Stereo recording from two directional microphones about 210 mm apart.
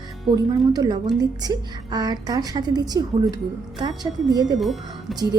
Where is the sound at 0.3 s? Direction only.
20° right (ahead or behind).